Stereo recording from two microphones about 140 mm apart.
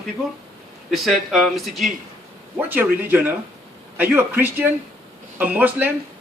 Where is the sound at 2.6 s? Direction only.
15° right (ahead or behind).